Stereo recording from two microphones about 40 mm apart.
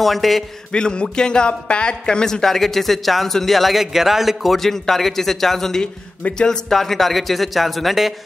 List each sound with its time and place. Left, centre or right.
0.0 s a man's voice: centre
0.7 s speech: left
2.4 s a man's voice: centre
4.6 s a man's voice: centre